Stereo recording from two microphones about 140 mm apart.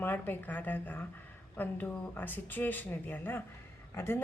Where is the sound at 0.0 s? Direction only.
15° left (ahead or behind).